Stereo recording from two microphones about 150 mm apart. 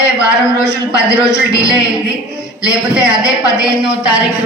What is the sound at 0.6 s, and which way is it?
Speech, 5° right (ahead or behind).